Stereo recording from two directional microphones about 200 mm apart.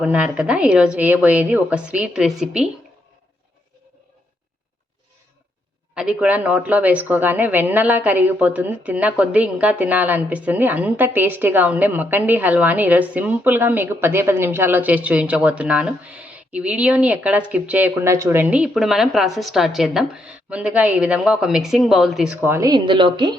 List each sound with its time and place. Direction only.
0.0 s a woman's voice: 5° right (ahead or behind)
5.9 s speech: 5° right (ahead or behind)
22.4 s speech: 15° right (ahead or behind)